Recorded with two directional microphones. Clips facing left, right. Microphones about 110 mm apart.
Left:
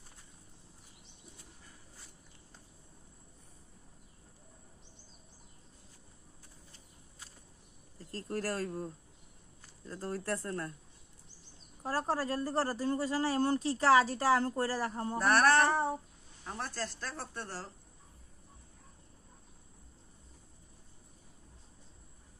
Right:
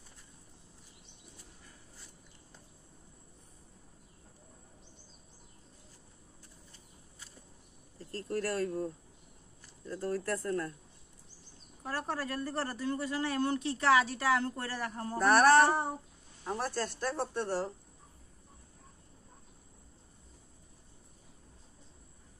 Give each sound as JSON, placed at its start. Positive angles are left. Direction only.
{"t": 8.1, "sound": "speech", "side_deg": 35}
{"t": 9.8, "sound": "speech", "side_deg": 30}
{"t": 11.8, "sound": "speech", "side_deg": 30}
{"t": 15.1, "sound": "a sound", "side_deg": 0}
{"t": 16.4, "sound": "speech", "side_deg": -15}